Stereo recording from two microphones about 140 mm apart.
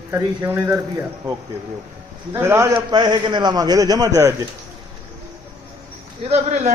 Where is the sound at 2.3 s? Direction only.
20° right (ahead or behind).